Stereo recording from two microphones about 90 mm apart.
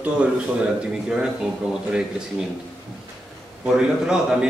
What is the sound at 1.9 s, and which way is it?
Speech, 10° right (ahead or behind).